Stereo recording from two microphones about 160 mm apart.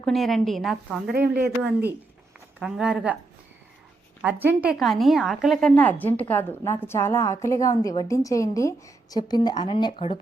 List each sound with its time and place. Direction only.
0.0 s a woman's voice: centre (ahead or behind)
1.1 s speech: 80° right
2.6 s a woman's voice: 5° right (ahead or behind)
4.2 s a woman's voice: 10° right (ahead or behind); by 10.2 s 35° left (ahead or behind)